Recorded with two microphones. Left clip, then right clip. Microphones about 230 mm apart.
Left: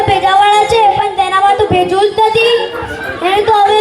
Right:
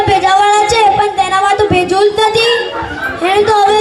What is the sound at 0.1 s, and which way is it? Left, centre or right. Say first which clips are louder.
Music: left 1 dB; right.